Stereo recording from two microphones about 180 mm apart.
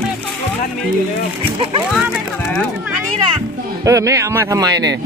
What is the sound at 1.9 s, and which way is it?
Speech, 5° left (ahead or behind).